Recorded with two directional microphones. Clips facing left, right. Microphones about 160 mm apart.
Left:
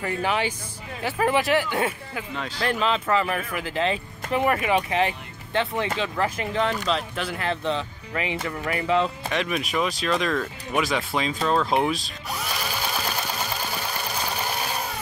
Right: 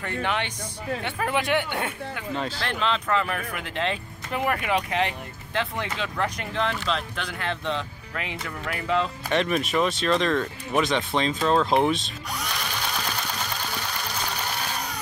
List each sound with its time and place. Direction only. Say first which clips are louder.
0.0 s speech: left 3 dB; 5° left (ahead or behind)
2.3 s speech: right 5 dB; 30° right (ahead or behind)
2.6 s speech: left 7 dB; 5° left (ahead or behind)